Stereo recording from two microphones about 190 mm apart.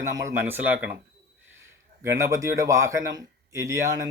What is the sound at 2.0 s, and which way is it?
A man's voice, 15° right (ahead or behind).